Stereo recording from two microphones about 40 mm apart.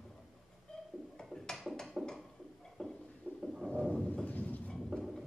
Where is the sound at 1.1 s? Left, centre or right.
Centre.